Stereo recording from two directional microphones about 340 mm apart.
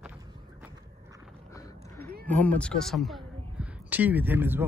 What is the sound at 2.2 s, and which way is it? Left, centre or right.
Speech, centre.